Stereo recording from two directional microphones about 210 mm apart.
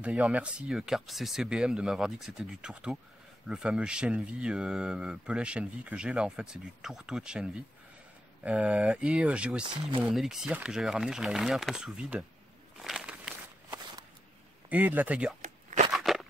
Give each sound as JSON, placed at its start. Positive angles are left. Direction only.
{"t": 0.0, "sound": "speech", "side_deg": -5}
{"t": 8.5, "sound": "speech", "side_deg": -5}
{"t": 12.8, "sound": "walk", "side_deg": -5}
{"t": 14.7, "sound": "speech", "side_deg": -10}
{"t": 15.4, "sound": "a sound", "side_deg": -35}
{"t": 15.9, "sound": "a sound", "side_deg": 0}